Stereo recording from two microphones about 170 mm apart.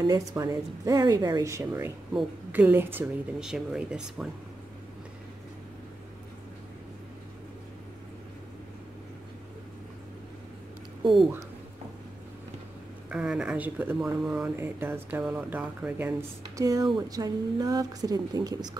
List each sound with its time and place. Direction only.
0.0 s a woman's voice: 20° right (ahead or behind); by 4.3 s centre (ahead or behind)
13.1 s a woman's voice: 5° right (ahead or behind); by 18.7 s 20° right (ahead or behind)